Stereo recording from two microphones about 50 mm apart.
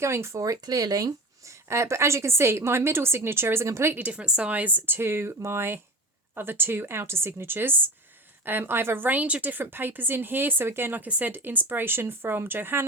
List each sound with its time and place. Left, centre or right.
0.0 s speech: right
1.5 s a woman's voice: right
3.9 s a woman's voice: right
11.0 s a woman's voice: right